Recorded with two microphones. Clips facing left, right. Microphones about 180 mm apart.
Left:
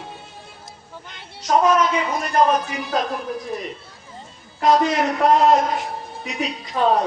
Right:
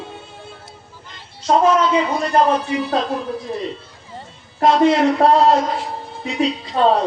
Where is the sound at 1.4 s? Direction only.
30° right (ahead or behind).